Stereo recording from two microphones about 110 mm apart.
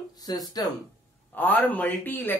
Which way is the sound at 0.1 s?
35° left (ahead or behind).